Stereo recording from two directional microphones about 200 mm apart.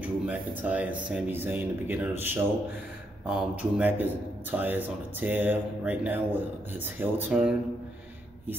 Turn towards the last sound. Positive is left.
turn(degrees=-5)  # may be behind; listen again after turning